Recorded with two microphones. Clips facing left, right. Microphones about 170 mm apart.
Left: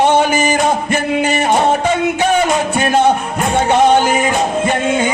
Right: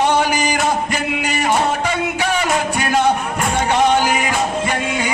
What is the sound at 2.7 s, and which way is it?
Music, 25° left (ahead or behind).